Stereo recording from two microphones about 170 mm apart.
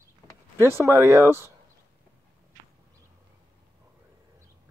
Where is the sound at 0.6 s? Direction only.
15° right (ahead or behind).